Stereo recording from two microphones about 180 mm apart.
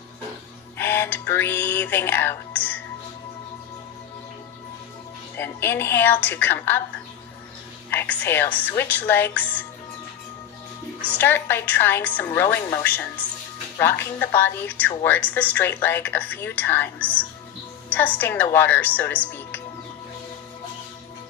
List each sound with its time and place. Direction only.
0.8 s music: 10° left (ahead or behind)
5.4 s a woman's voice: 10° left (ahead or behind)
7.9 s a woman's voice: 10° left (ahead or behind)
11.2 s a woman's voice: 10° left (ahead or behind)